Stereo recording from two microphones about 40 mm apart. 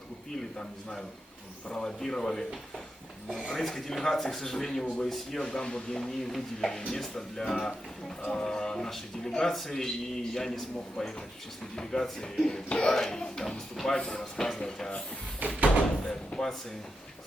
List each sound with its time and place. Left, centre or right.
1.7 s a man's voice: centre
3.5 s a man's voice: centre
5.5 s a man's voice: left
15.4 s door: right
16.0 s slam: centre